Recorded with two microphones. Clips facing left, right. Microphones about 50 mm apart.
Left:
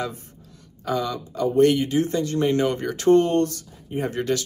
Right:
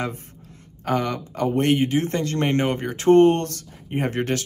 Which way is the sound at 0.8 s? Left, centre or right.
Right.